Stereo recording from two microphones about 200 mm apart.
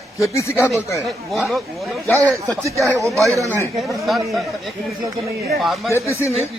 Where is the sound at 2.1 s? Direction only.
15° right (ahead or behind).